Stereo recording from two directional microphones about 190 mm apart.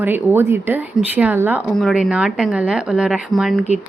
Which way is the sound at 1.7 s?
Centre (ahead or behind).